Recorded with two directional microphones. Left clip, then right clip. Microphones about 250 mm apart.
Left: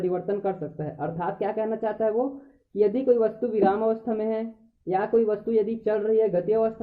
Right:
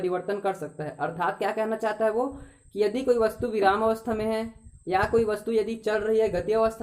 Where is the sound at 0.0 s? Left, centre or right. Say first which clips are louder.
Left 1 dB; centre.